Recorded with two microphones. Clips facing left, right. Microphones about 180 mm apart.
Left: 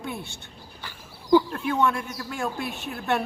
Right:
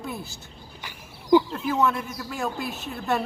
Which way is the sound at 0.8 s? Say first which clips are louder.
Right 2 dB; 20° right (ahead or behind).